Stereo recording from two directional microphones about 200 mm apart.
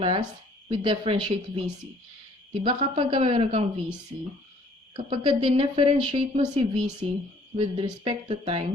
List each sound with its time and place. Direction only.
0.0 s speech: 25° right (ahead or behind)
4.9 s speech: 25° right (ahead or behind)